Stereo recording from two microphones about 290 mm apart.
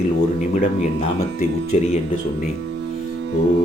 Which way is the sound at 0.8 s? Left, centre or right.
Left.